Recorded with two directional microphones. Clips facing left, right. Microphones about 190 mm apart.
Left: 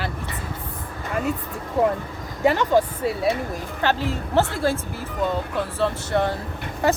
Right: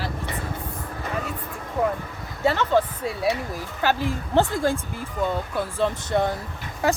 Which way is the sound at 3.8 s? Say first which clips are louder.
Even; 10° right (ahead or behind).